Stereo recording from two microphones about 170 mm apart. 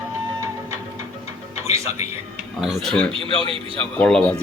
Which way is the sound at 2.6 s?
Centre (ahead or behind).